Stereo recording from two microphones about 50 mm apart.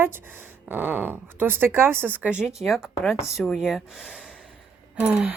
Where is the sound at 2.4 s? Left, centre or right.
Centre.